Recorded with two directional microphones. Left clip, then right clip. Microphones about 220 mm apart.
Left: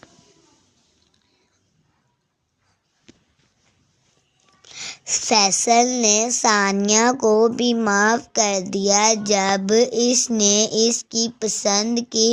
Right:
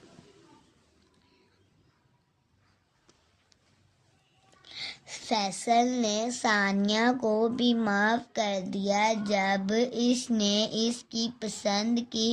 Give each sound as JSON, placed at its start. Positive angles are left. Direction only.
{"t": 4.6, "sound": "a woman's voice", "side_deg": 35}